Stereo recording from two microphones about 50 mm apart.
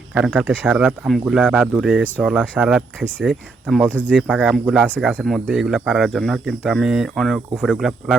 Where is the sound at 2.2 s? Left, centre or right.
Right.